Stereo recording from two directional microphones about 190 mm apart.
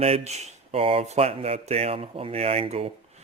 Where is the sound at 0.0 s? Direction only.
35° right (ahead or behind).